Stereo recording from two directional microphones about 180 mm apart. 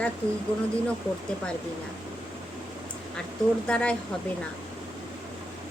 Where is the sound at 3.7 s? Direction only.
5° left (ahead or behind).